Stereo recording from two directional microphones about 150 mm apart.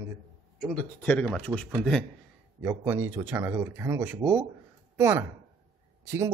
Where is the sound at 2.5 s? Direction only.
10° right (ahead or behind).